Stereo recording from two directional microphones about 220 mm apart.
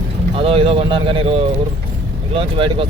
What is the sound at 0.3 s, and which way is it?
Speech, 25° right (ahead or behind).